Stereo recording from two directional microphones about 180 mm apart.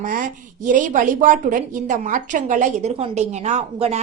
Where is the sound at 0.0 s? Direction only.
45° right (ahead or behind).